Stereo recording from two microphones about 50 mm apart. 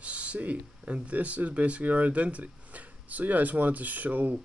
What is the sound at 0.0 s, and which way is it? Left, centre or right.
Speech, right.